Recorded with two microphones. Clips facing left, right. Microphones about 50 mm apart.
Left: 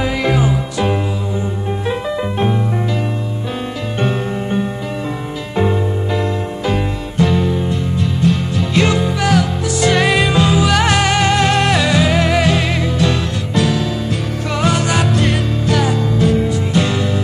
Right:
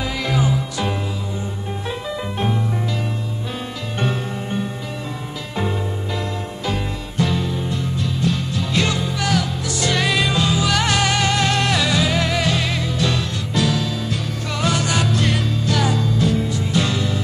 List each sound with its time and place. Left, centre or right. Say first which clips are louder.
0.0 s music: left 5 dB; left
1.9 s music: left 7 dB; left
4.0 s music: left 5 dB; left
13.0 s music: left 5 dB; centre